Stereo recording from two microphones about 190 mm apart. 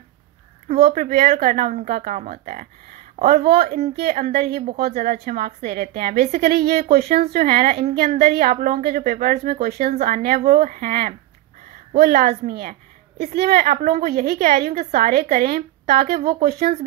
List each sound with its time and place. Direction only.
0.7 s a woman's voice: 50° right (ahead or behind)
13.7 s a woman's voice: 40° right (ahead or behind)